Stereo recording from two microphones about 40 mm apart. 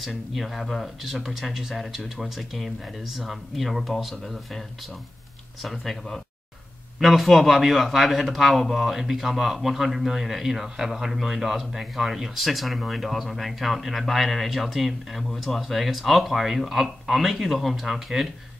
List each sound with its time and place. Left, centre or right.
0.0 s a man's voice: centre
5.6 s a man's voice: centre